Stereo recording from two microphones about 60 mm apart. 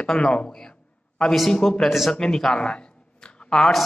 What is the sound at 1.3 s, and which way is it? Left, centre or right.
Speech, centre.